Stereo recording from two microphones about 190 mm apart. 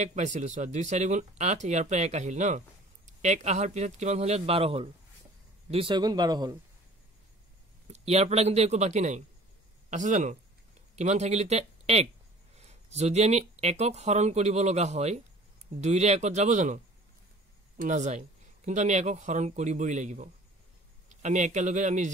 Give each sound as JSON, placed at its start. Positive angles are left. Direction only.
{"t": 0.0, "sound": "speech", "side_deg": -40}
{"t": 7.9, "sound": "speech", "side_deg": -35}